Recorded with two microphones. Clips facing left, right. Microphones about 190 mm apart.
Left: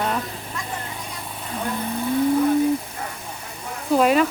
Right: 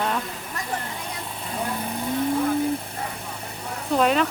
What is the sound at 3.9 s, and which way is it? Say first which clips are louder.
Speech: left 3 dB; 5° left (ahead or behind).